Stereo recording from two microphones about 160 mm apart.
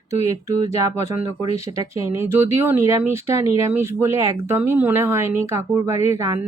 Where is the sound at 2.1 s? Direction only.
15° right (ahead or behind).